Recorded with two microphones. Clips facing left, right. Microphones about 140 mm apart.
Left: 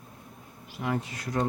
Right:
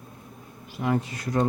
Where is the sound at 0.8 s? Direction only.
40° right (ahead or behind).